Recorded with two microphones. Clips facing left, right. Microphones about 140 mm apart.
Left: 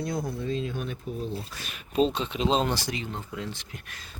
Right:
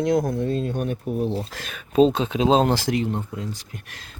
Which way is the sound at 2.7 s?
75° right (ahead or behind).